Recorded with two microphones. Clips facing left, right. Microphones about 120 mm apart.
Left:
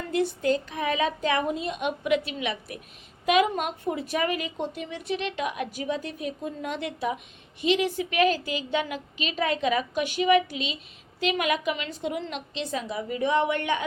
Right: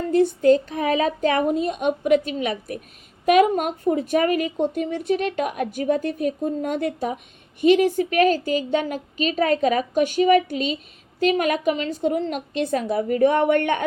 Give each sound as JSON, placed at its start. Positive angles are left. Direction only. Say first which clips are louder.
{"t": 0.1, "sound": "a woman's voice", "louder": "right 8 dB", "side_deg": -40}